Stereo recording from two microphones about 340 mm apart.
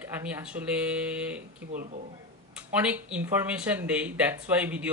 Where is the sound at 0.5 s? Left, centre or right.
Centre.